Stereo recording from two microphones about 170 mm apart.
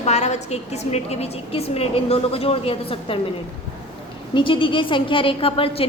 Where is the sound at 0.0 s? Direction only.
40° left (ahead or behind).